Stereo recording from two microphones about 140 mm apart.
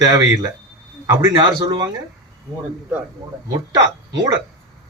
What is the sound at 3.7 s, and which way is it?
Speech, 25° right (ahead or behind).